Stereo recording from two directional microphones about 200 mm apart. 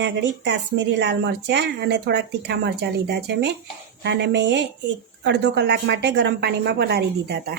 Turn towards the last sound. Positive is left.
turn(degrees=-55)  # may be behind; listen again after turning